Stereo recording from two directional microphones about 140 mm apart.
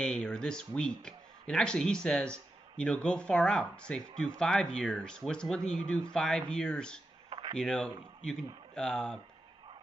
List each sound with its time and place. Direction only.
0.0 s speech: 5° left (ahead or behind)
7.3 s a sound: 40° right (ahead or behind)
7.6 s speech: 5° left (ahead or behind)